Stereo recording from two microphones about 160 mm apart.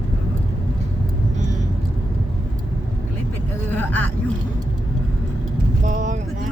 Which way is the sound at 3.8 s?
10° left (ahead or behind).